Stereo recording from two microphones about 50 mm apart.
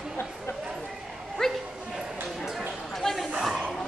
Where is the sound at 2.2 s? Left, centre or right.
Centre.